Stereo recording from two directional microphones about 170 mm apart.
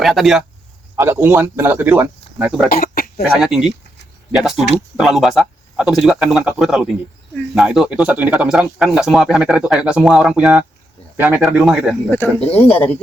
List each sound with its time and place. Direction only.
0.0 s speech: centre (ahead or behind)
0.9 s speech: 15° right (ahead or behind)
2.6 s throat clearing: 60° left (ahead or behind)
3.3 s speech: 5° right (ahead or behind)
12.1 s speech: 10° left (ahead or behind)